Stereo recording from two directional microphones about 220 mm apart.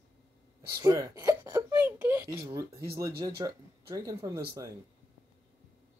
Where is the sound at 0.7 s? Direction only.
15° right (ahead or behind).